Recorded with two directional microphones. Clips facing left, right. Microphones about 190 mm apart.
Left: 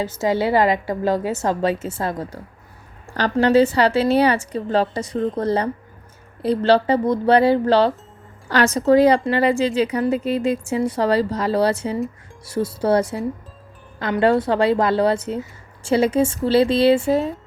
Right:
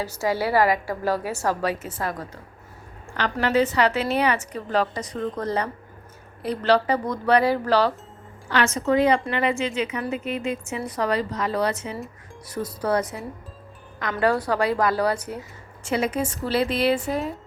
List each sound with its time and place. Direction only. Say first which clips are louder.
0.0 s a woman's voice: left 4 dB; 20° left (ahead or behind)
8.4 s a woman's voice: left 6 dB; 40° left (ahead or behind)